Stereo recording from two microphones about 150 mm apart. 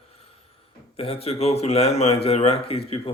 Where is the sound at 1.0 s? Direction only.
40° left (ahead or behind).